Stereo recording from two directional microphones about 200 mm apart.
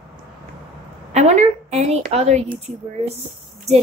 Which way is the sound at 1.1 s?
35° right (ahead or behind).